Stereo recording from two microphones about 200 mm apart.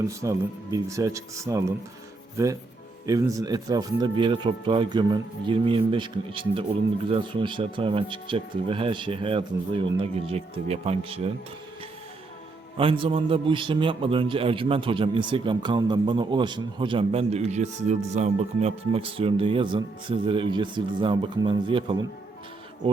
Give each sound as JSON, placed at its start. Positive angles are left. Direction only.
{"t": 0.0, "sound": "a man's voice", "side_deg": -15}
{"t": 12.7, "sound": "a man's voice", "side_deg": -25}